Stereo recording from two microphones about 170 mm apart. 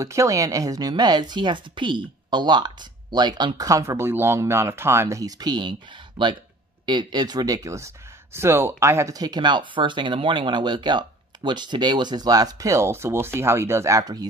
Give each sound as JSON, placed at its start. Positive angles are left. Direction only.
{"t": 0.0, "sound": "speech", "side_deg": -20}